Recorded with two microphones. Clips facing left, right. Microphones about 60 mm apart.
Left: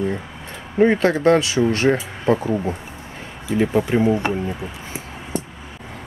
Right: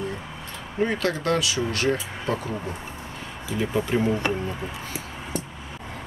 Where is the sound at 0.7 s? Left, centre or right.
Left.